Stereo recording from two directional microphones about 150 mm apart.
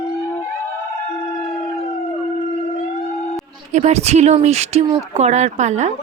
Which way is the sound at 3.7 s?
45° right (ahead or behind).